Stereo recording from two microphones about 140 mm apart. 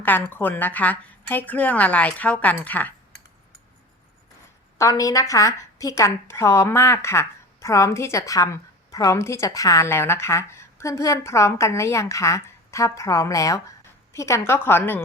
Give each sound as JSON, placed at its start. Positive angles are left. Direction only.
{"t": 0.0, "sound": "a woman's voice", "side_deg": 15}
{"t": 4.8, "sound": "a woman's voice", "side_deg": 25}